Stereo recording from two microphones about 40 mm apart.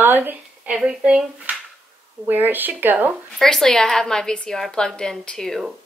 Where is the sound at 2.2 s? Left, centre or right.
Right.